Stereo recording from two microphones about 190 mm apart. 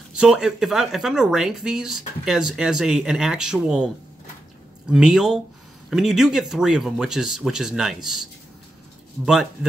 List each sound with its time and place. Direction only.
0.1 s speech: 5° right (ahead or behind)